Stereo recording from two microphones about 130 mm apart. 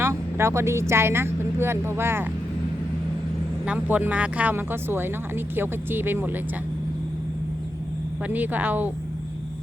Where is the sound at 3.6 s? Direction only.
10° right (ahead or behind).